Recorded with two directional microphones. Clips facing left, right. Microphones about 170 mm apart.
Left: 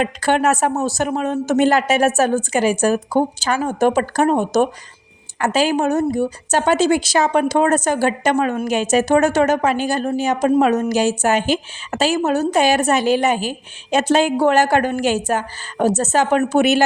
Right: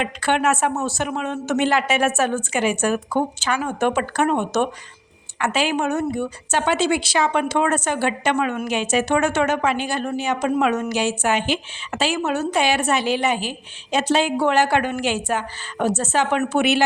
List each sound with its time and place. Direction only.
0.0 s a woman's voice: 40° left (ahead or behind)